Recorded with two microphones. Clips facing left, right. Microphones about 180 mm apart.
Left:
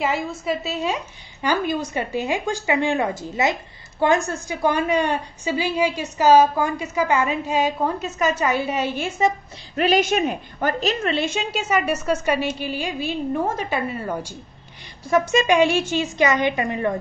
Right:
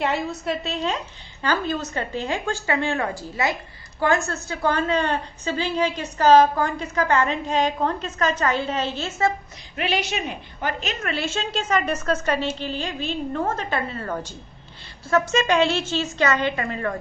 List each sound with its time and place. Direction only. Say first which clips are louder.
0.0 s a woman's voice: left 1 dB; centre (ahead or behind)
9.8 s a woman's voice: left 7 dB; 45° left (ahead or behind)
11.1 s a woman's voice: left 4 dB; 20° left (ahead or behind)